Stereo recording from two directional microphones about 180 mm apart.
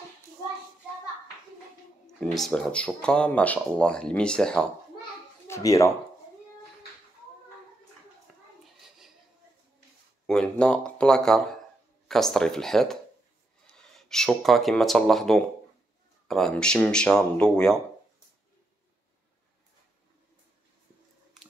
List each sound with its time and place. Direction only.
2.1 s speech: 5° left (ahead or behind)
5.5 s speech: 20° left (ahead or behind)
8.3 s children playing: 5° left (ahead or behind)
10.2 s speech: 5° left (ahead or behind)